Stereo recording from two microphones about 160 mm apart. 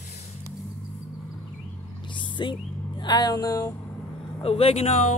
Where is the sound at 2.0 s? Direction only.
30° left (ahead or behind).